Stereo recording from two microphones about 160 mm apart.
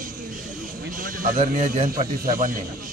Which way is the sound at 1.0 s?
55° right (ahead or behind).